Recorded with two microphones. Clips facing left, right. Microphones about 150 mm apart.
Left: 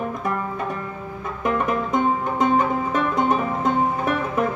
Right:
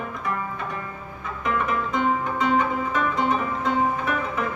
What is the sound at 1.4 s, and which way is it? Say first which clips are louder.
Music: left 3 dB; 45° left (ahead or behind).